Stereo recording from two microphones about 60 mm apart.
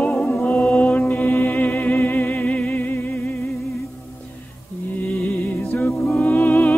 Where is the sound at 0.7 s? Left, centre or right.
Left.